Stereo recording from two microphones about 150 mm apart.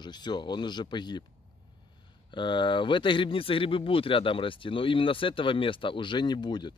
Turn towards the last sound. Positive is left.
turn(degrees=30)  # may be behind; listen again after turning